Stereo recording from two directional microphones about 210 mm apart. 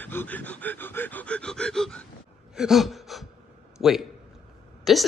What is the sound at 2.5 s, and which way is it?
Gasp, centre (ahead or behind).